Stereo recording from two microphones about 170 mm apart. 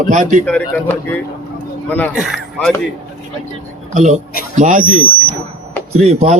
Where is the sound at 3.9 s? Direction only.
45° right (ahead or behind).